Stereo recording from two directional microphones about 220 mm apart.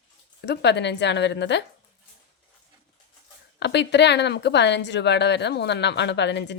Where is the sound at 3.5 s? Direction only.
50° left (ahead or behind).